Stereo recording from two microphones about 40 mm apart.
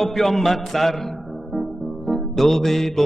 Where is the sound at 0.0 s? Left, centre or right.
Centre.